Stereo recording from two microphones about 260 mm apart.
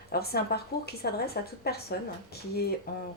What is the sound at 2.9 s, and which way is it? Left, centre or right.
Speech, left.